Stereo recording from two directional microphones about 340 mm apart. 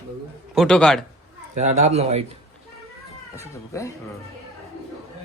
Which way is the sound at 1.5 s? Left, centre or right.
Centre.